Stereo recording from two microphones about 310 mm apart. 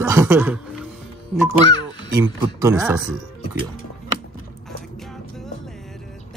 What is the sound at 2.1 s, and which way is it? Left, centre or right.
Speech, centre.